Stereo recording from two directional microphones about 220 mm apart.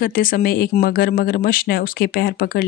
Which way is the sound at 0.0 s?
40° left (ahead or behind).